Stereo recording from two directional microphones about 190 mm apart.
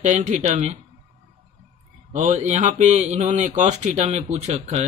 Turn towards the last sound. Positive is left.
turn(degrees=-35)  # may be behind; listen again after turning